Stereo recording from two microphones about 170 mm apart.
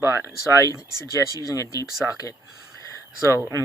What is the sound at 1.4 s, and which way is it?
Speech, 20° left (ahead or behind).